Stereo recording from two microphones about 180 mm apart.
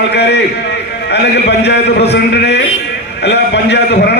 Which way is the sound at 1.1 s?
70° left (ahead or behind).